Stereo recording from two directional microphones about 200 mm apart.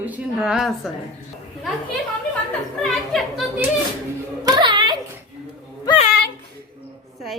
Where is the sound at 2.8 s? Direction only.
Centre (ahead or behind).